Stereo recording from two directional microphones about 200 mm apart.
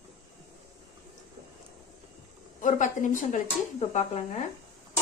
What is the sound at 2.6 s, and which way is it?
Speech, 40° left (ahead or behind).